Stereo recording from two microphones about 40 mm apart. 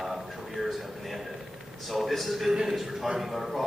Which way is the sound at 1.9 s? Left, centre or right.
Centre.